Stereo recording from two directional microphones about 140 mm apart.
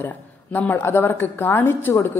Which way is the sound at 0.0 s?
10° left (ahead or behind).